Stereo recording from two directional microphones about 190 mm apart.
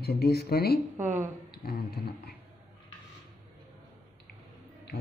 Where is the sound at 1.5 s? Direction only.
55° left (ahead or behind).